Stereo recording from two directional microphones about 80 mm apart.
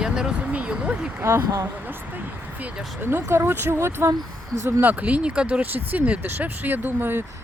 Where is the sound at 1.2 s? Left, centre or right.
Right.